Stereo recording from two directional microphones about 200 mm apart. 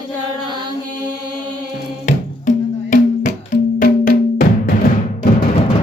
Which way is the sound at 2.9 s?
40° left (ahead or behind).